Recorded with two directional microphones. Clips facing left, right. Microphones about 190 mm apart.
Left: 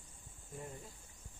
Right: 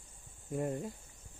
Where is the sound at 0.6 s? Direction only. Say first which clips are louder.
Right 13 dB; 65° right (ahead or behind).